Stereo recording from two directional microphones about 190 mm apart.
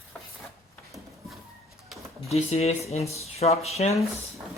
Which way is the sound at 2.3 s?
35° left (ahead or behind).